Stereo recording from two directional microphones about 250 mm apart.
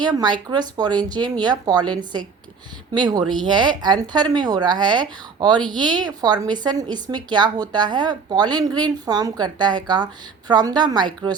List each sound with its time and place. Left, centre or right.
0.0 s speech: centre